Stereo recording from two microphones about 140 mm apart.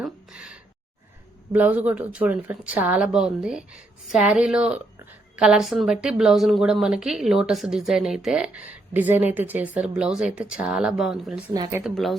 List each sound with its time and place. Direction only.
0.0 s gasp: 5° right (ahead or behind)
1.5 s speech: 10° right (ahead or behind)
11.5 s speech: 30° right (ahead or behind)
11.8 s speech: centre (ahead or behind)